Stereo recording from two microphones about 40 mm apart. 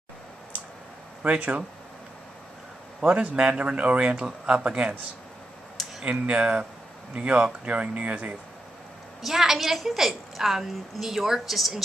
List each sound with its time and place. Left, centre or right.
1.2 s speech: right
3.0 s speech: right
6.0 s speech: right
9.2 s a woman's voice: centre